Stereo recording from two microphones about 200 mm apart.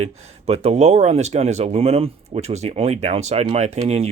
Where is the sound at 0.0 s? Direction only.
30° right (ahead or behind).